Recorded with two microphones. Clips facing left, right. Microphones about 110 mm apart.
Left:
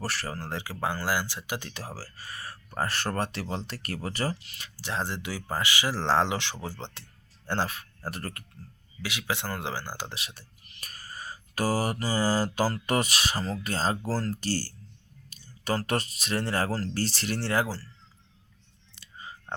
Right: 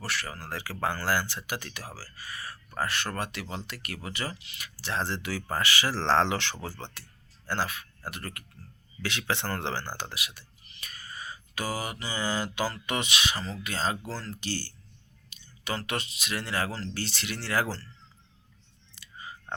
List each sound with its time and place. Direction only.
0.0 s speech: 35° left (ahead or behind)
2.7 s mantra: 35° left (ahead or behind)
4.8 s speech: 15° left (ahead or behind); by 8.4 s 30° left (ahead or behind)
9.0 s speech: 10° left (ahead or behind)
10.1 s mantra: 30° left (ahead or behind)
18.9 s whispering: 25° left (ahead or behind)